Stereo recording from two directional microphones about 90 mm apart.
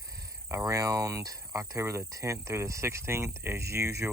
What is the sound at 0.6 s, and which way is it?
Speech, 40° right (ahead or behind).